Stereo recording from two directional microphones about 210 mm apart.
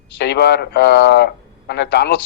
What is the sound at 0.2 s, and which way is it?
A man's voice, 50° left (ahead or behind).